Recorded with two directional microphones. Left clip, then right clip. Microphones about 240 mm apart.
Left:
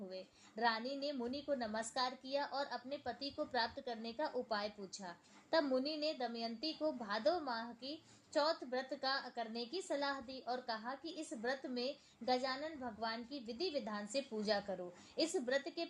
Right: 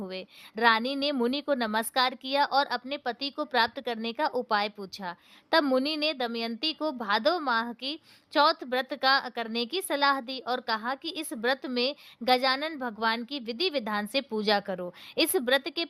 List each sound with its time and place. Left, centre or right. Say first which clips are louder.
0.1 s a woman's voice: right 11 dB; right